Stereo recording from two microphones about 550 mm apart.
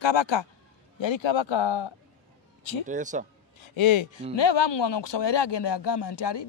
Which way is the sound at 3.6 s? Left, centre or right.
Left.